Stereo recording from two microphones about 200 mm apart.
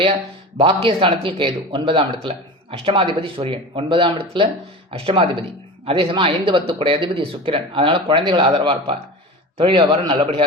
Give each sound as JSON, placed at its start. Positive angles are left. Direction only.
{"t": 0.0, "sound": "speech", "side_deg": -30}